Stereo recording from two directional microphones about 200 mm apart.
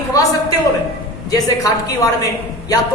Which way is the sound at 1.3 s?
20° left (ahead or behind).